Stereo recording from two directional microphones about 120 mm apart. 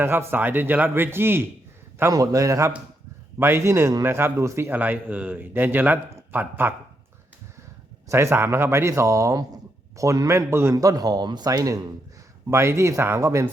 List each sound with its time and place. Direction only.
0.0 s a man's voice: 20° right (ahead or behind)
8.0 s a man's voice: 20° right (ahead or behind)